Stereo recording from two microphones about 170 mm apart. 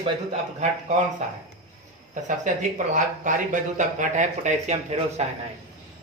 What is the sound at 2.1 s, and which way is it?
Speech, 50° right (ahead or behind).